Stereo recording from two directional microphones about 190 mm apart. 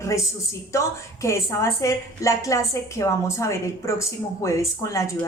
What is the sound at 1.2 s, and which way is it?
Speech, 15° left (ahead or behind).